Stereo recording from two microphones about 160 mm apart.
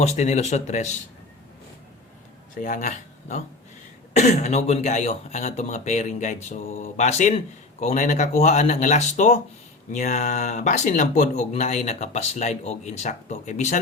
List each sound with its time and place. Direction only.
0.0 s speech: 45° left (ahead or behind)
2.6 s speech: 55° left (ahead or behind)